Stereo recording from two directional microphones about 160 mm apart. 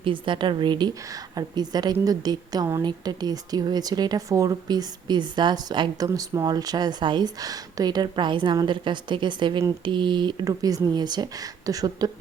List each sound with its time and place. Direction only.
0.0 s speech: 30° right (ahead or behind)